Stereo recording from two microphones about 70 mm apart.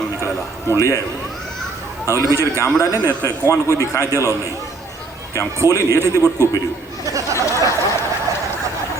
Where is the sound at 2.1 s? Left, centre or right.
Left.